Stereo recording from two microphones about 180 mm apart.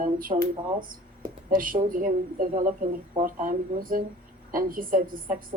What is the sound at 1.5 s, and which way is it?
Speech, 50° right (ahead or behind).